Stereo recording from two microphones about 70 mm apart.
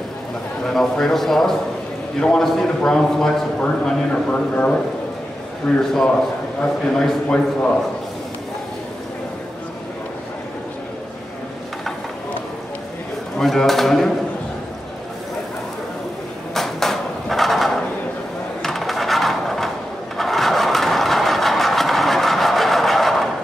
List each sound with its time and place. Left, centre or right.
0.7 s a man's voice: centre
13.4 s a man's voice: centre
16.5 s a sound: centre
20.2 s vehicle: centre